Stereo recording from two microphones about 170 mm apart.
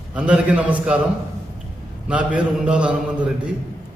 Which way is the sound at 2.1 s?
5° right (ahead or behind).